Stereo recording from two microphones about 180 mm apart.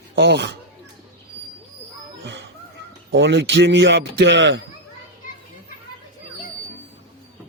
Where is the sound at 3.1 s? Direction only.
80° right.